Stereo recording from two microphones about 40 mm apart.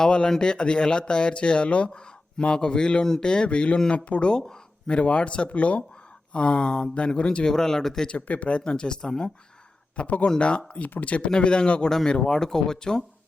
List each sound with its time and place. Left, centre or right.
0.0 s speech: left
4.3 s speech: centre
4.9 s speech: left; by 8.1 s centre
8.1 s speech: left
10.8 s speech: left
11.3 s speech: left
11.9 s speech: centre